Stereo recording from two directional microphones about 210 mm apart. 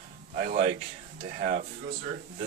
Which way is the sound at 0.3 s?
40° right (ahead or behind).